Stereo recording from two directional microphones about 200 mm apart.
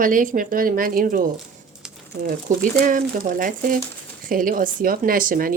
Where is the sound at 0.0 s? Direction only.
40° right (ahead or behind).